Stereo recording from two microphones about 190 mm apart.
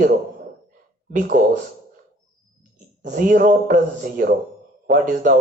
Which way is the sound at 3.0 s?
45° right (ahead or behind).